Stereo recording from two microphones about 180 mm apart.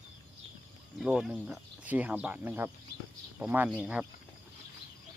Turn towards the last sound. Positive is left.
turn(degrees=-5)  # may be behind; listen again after turning